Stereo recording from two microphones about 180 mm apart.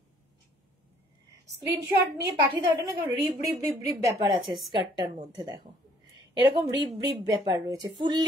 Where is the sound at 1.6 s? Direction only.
70° right (ahead or behind).